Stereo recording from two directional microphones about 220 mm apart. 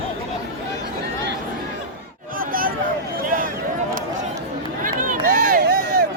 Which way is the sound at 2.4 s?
40° right (ahead or behind).